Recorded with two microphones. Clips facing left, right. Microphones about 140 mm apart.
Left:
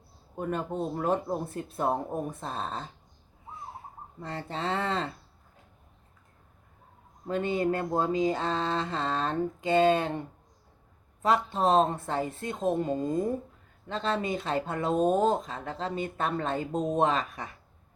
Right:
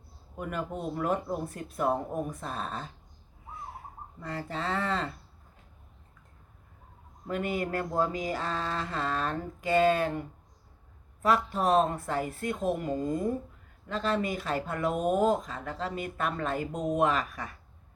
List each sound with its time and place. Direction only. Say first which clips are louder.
0.3 s speech: left 3 dB; 30° left (ahead or behind)
4.2 s speech: left 1 dB; 30° left (ahead or behind)
7.3 s speech: left 4 dB; 25° left (ahead or behind)